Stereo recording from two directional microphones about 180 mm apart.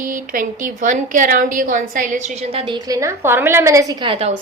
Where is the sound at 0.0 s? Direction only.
45° right (ahead or behind).